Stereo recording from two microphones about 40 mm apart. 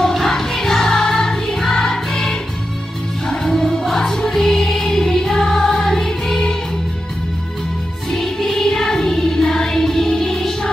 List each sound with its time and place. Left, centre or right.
0.0 s music: centre
8.1 s music: centre